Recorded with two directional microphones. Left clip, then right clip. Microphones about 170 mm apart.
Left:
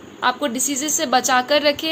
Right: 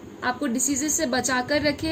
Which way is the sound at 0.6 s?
15° right (ahead or behind).